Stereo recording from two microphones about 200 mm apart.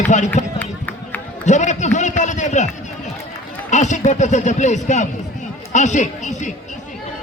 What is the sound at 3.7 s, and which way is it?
Speech, 35° left (ahead or behind).